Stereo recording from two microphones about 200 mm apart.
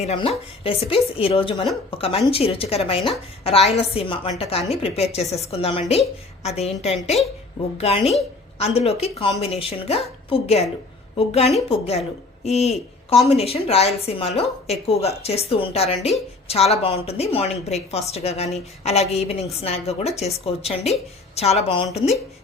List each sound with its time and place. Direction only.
0.0 s a woman's voice: 30° left (ahead or behind)